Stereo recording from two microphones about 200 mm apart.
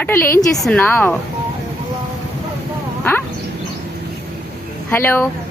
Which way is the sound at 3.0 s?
10° left (ahead or behind).